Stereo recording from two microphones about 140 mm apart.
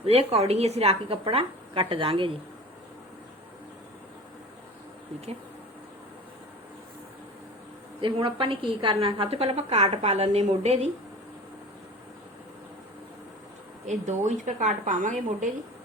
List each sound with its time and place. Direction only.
0.0 s a woman's voice: 45° right (ahead or behind)
8.0 s a woman's voice: 40° right (ahead or behind)
13.8 s a woman's voice: 55° right (ahead or behind)